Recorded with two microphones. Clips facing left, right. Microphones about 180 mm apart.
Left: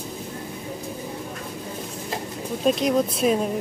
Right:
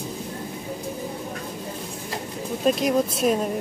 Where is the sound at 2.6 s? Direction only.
Centre (ahead or behind).